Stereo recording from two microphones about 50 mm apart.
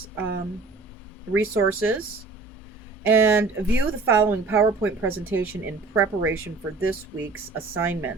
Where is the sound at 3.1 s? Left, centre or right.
Right.